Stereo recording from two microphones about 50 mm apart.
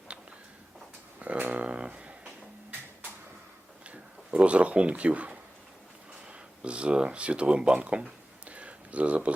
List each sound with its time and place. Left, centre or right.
0.1 s a sound: right
1.2 s speech: right
3.8 s speech: right
6.6 s speech: right